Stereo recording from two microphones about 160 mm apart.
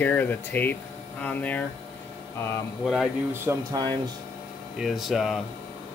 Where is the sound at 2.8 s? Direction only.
Centre (ahead or behind).